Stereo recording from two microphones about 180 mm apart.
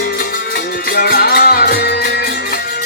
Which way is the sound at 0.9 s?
60° left (ahead or behind).